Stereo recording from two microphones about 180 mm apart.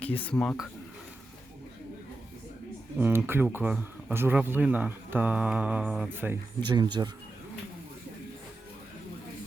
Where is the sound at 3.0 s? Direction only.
10° right (ahead or behind).